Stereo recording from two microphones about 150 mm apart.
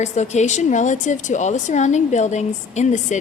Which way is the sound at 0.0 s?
50° left (ahead or behind).